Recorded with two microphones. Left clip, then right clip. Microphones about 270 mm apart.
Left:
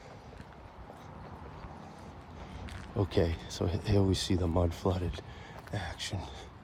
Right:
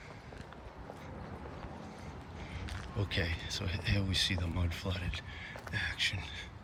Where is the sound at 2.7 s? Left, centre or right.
Left.